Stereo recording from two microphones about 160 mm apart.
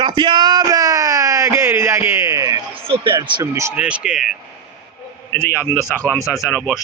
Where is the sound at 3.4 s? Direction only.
15° right (ahead or behind).